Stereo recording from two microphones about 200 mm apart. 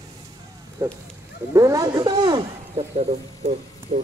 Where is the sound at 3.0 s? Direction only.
35° right (ahead or behind).